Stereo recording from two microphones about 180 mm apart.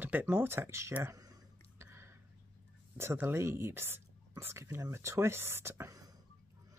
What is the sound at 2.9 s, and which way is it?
Speech, 15° right (ahead or behind).